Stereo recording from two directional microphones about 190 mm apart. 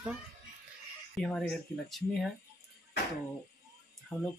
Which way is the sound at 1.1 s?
Centre (ahead or behind).